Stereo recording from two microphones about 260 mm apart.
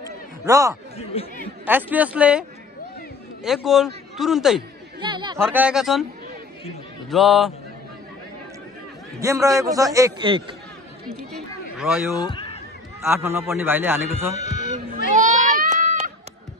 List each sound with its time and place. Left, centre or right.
0.5 s a man's voice: centre
1.1 s speech: left
1.7 s a man's voice: centre
3.4 s a man's voice: centre
5.0 s chatter: centre
5.4 s a man's voice: centre
7.1 s a man's voice: centre
9.2 s a man's voice: centre
11.1 s speech: centre
12.3 s a sound: centre
13.0 s a man's voice: centre
14.3 s music: left
15.1 s a sound: right